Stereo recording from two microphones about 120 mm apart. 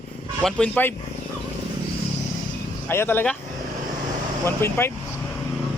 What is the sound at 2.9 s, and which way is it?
Speech, 20° left (ahead or behind).